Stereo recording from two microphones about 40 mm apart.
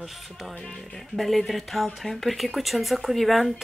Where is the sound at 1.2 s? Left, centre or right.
Centre.